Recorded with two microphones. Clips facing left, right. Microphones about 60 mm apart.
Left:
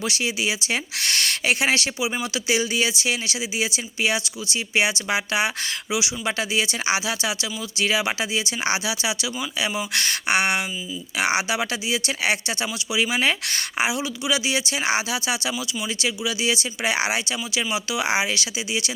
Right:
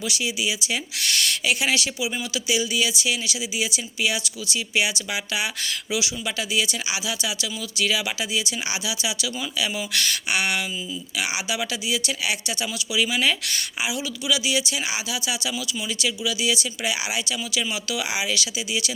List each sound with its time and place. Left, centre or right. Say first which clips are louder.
0.0 s speech: left 2 dB; left
5.9 s speech: left 1 dB; left
6.2 s speech: left 2 dB; left
12.9 s speech: left 1 dB; left